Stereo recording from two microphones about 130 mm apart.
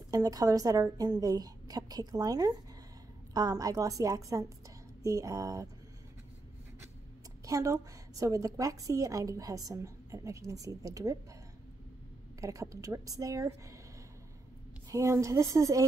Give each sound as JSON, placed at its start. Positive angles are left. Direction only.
{"t": 0.1, "sound": "a woman's voice", "side_deg": -25}
{"t": 7.4, "sound": "a woman's voice", "side_deg": -25}
{"t": 12.4, "sound": "a woman's voice", "side_deg": -25}
{"t": 14.9, "sound": "a woman's voice", "side_deg": -25}